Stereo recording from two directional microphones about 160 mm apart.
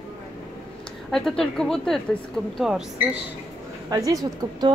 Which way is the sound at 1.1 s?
Centre (ahead or behind).